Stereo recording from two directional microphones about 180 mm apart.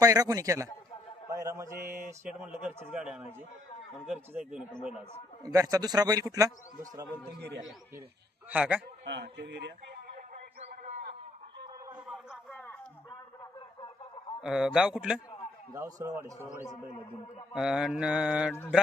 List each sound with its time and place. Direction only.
0.0 s a man's voice: 20° right (ahead or behind)
1.8 s mantra: 55° right (ahead or behind)
2.4 s a man's voice: 10° right (ahead or behind)
4.0 s mantra: 5° right (ahead or behind)
5.4 s a man's voice: 20° right (ahead or behind)
8.4 s mantra: 5° right (ahead or behind)
9.0 s speech: 75° right (ahead or behind)
10.2 s a sound: 45° right (ahead or behind)
11.9 s a sound: 5° right (ahead or behind)
12.5 s a sound: 10° left (ahead or behind)
14.4 s mantra: 5° right (ahead or behind)
15.7 s a man's voice: 20° right (ahead or behind)
17.5 s mantra: 5° right (ahead or behind)